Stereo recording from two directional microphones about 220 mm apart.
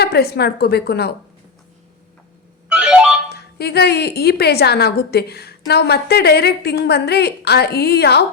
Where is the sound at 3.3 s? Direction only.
50° left (ahead or behind).